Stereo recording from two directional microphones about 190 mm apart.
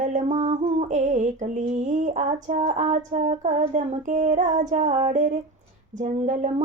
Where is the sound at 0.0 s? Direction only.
40° right (ahead or behind).